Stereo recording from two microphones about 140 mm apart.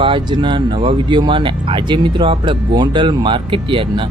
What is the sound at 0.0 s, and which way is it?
Speech, 35° right (ahead or behind).